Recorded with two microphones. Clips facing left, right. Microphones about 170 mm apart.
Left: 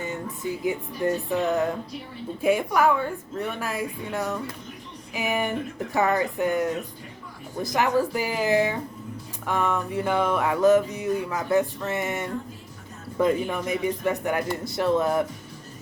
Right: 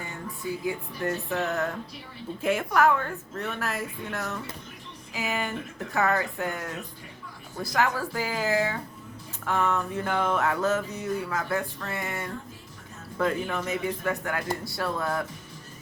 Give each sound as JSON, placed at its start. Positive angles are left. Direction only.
{"t": 0.6, "sound": "music", "side_deg": 15}
{"t": 14.6, "sound": "speech", "side_deg": 20}